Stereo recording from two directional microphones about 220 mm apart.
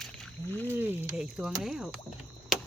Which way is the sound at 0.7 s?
10° right (ahead or behind).